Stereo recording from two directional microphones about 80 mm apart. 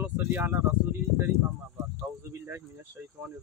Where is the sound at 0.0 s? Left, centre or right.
Right.